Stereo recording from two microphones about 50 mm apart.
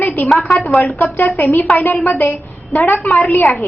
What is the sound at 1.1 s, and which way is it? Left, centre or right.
A child's voice, left.